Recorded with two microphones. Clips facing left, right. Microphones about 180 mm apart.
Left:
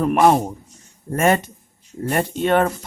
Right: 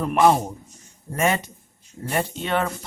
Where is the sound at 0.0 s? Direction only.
55° left (ahead or behind).